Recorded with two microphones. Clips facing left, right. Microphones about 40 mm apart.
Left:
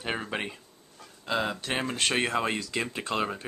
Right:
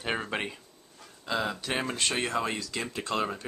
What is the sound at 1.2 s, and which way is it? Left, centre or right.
Speech, centre.